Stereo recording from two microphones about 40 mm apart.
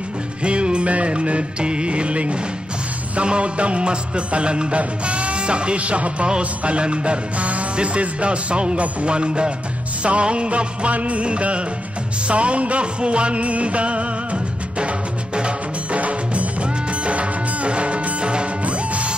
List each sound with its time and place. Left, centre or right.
0.4 s music: right